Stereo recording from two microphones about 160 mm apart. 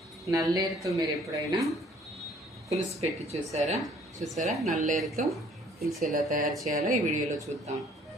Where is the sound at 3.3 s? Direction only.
45° right (ahead or behind).